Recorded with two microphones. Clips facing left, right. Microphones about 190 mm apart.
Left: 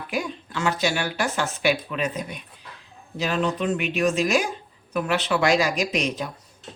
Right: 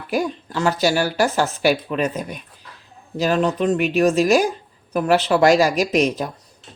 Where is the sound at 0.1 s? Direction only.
40° right (ahead or behind).